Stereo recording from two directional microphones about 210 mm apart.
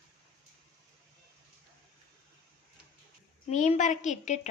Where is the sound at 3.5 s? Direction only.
35° left (ahead or behind).